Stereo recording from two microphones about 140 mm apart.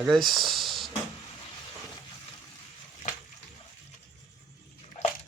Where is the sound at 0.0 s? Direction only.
Centre (ahead or behind).